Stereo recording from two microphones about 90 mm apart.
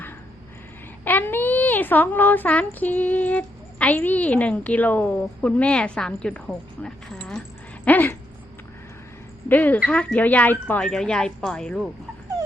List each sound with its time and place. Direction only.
1.0 s speech: 20° left (ahead or behind)
7.9 s speech: 20° left (ahead or behind)
9.5 s a woman's voice: 20° left (ahead or behind)
10.8 s a woman's voice: 10° left (ahead or behind)